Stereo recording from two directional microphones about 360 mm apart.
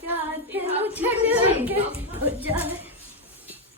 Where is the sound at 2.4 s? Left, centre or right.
Centre.